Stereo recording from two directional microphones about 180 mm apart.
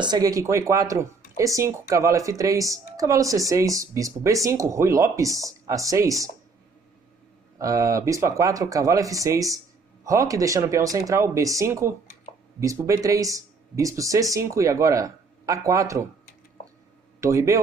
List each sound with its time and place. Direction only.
0.0 s speech: 20° right (ahead or behind)
7.5 s speech: 20° right (ahead or behind)
17.2 s a man's voice: 15° right (ahead or behind)